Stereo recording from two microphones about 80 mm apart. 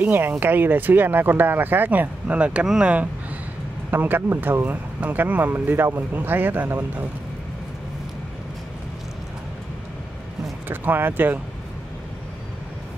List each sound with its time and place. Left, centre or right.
0.0 s speech: right
3.9 s speech: right
10.7 s speech: right